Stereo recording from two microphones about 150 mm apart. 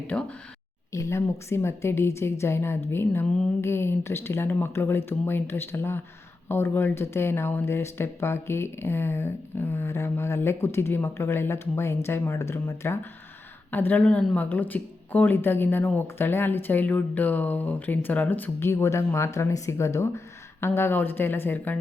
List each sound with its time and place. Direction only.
0.1 s speech: 10° left (ahead or behind)